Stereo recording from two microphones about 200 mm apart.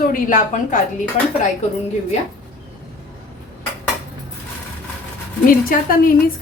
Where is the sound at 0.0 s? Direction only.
45° left (ahead or behind).